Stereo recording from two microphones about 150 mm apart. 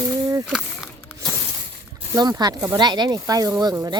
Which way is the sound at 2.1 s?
25° right (ahead or behind).